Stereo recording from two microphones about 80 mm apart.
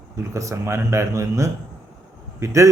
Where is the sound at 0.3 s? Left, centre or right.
Right.